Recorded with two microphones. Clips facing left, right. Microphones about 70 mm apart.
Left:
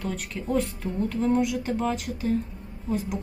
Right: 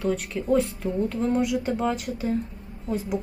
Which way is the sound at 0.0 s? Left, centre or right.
Centre.